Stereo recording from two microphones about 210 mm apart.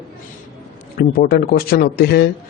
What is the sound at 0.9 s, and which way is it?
Speech, 45° left (ahead or behind).